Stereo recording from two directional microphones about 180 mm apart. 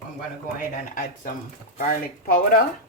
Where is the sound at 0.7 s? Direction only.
50° left (ahead or behind).